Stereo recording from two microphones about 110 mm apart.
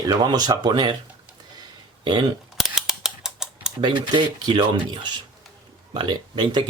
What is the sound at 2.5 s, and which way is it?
Camera, 5° right (ahead or behind).